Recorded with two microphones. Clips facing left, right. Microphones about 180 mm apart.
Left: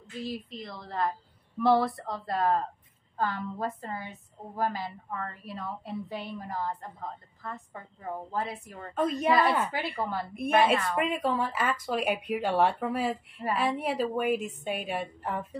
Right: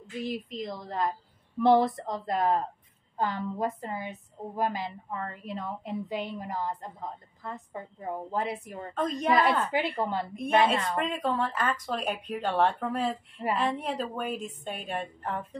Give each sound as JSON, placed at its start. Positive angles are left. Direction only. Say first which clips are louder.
{"t": 0.0, "sound": "a woman's voice", "louder": "right 2 dB", "side_deg": -20}
{"t": 8.9, "sound": "speech", "louder": "left 2 dB", "side_deg": 10}
{"t": 9.7, "sound": "a woman's voice", "louder": "right 5 dB", "side_deg": -15}
{"t": 10.3, "sound": "speech", "louder": "left 1 dB", "side_deg": 10}